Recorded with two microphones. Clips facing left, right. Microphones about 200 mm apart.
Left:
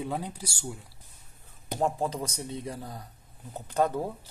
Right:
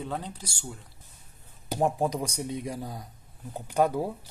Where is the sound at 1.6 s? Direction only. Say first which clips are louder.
Right 2 dB; 15° right (ahead or behind).